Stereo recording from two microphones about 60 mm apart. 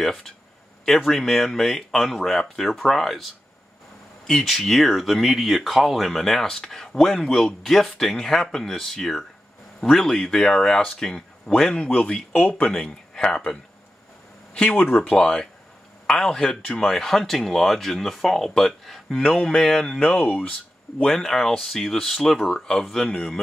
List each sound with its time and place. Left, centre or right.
0.0 s speech: centre
4.3 s speech: centre; by 12.6 s left
12.6 s speech: centre
15.0 s speech: centre
21.0 s speech: centre